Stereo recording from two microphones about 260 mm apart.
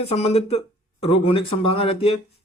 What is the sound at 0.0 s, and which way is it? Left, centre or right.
Speech, left.